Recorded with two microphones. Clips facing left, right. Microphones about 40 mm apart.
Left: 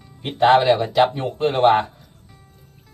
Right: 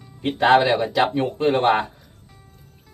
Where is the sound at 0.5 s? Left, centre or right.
Centre.